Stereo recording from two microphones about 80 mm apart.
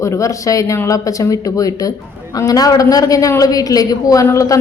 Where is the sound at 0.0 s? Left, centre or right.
Left.